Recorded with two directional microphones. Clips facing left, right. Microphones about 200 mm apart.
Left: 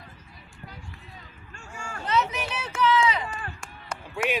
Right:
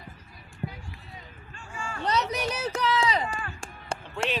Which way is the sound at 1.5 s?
45° left (ahead or behind).